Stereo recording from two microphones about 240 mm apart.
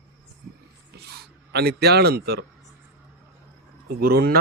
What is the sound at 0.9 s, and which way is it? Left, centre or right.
A man's voice, right.